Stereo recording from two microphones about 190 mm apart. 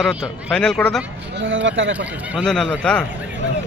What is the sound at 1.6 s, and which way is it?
Speech, 80° right.